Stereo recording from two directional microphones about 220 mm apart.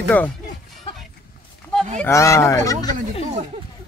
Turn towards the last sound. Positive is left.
turn(degrees=15)  # may be behind; listen again after turning